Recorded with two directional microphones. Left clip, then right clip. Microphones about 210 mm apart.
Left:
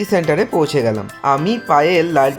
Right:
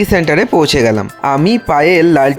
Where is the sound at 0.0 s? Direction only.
30° right (ahead or behind).